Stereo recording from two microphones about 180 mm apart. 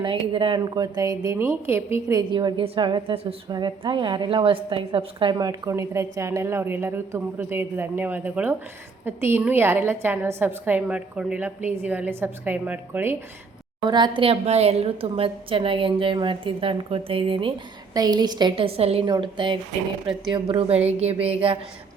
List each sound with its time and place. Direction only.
0.0 s a woman's voice: 30° right (ahead or behind); by 13.2 s 10° right (ahead or behind)
13.8 s a woman's voice: 25° right (ahead or behind)